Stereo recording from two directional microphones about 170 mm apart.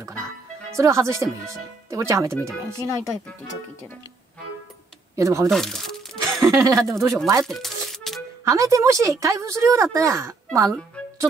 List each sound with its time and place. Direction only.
0.7 s speech: 15° right (ahead or behind)
5.1 s speech: 20° right (ahead or behind)
5.5 s crumpling: centre (ahead or behind)
6.4 s speech: 20° right (ahead or behind)
7.4 s music: centre (ahead or behind)
8.5 s a woman's voice: 20° right (ahead or behind)
11.0 s music: 5° left (ahead or behind)